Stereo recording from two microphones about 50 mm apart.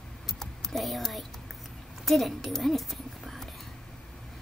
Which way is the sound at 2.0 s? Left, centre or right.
Centre.